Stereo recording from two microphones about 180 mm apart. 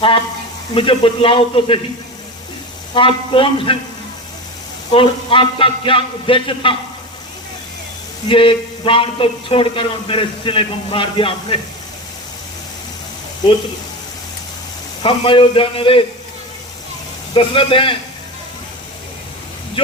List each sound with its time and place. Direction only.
0.7 s a man's voice: 30° left (ahead or behind)
2.9 s a man's voice: 30° left (ahead or behind)
4.9 s a man's voice: 30° left (ahead or behind)
8.3 s a man's voice: 30° left (ahead or behind)
15.0 s a man's voice: 25° left (ahead or behind)
17.3 s a man's voice: 30° left (ahead or behind)